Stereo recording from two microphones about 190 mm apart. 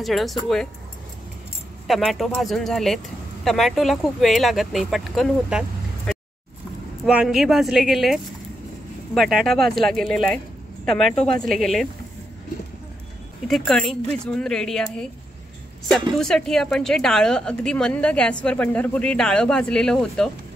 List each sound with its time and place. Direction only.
0.0 s speech: centre (ahead or behind)
1.9 s speech: centre (ahead or behind)
13.7 s speech: centre (ahead or behind)
16.2 s speech: 5° left (ahead or behind)